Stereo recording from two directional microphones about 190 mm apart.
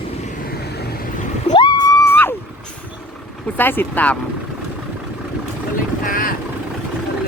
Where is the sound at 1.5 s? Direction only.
20° left (ahead or behind).